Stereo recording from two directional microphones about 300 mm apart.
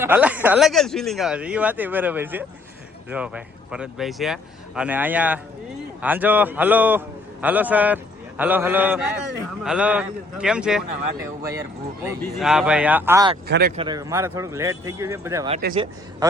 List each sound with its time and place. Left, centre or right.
0.0 s speech: centre
13.5 s speech: right
13.7 s a man's voice: centre
15.5 s a man's voice: centre